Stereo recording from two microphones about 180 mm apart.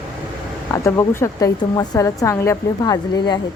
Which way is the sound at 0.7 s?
15° left (ahead or behind).